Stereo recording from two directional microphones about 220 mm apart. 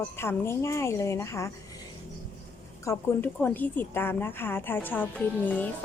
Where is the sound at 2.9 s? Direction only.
10° left (ahead or behind).